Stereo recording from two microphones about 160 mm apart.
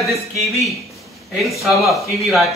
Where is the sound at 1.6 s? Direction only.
Centre (ahead or behind).